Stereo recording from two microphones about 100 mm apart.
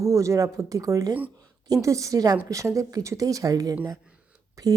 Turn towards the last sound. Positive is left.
turn(degrees=-35)  # may be behind; listen again after turning